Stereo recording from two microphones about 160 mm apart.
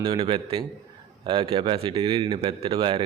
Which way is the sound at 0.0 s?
35° right (ahead or behind).